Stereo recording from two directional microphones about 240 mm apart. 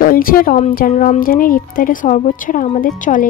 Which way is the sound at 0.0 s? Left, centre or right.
Left.